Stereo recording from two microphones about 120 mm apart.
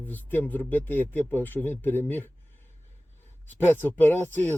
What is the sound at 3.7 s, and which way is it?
Speech, 15° left (ahead or behind).